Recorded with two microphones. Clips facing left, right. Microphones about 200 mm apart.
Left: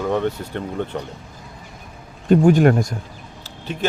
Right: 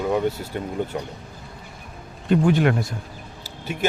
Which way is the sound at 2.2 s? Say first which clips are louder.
Left 5 dB; 45° left (ahead or behind).